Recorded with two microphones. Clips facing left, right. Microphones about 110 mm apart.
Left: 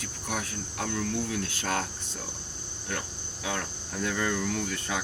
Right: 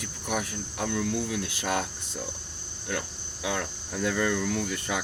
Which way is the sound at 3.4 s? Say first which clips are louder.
Right 3 dB; 10° right (ahead or behind).